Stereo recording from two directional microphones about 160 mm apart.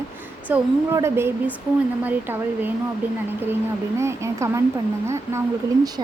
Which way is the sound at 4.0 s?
15° right (ahead or behind).